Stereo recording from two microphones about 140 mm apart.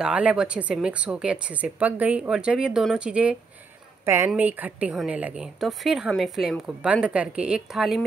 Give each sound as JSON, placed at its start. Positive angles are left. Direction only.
{"t": 0.0, "sound": "a woman's voice", "side_deg": -10}
{"t": 4.0, "sound": "a woman's voice", "side_deg": -20}